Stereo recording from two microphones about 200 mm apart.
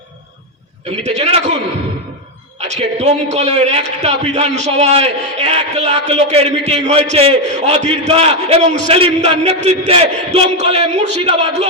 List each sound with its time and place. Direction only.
1.0 s a man's voice: 35° right (ahead or behind)
2.6 s a man's voice: 35° right (ahead or behind)